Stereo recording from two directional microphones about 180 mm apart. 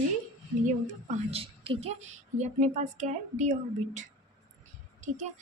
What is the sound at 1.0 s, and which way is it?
A woman's voice, 30° right (ahead or behind).